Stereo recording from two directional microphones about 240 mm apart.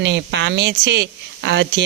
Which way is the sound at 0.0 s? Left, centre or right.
Right.